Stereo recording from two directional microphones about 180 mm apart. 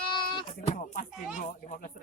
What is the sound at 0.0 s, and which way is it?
Sheep, 25° left (ahead or behind).